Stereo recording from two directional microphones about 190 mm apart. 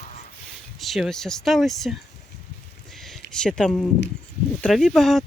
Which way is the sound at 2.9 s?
Centre (ahead or behind).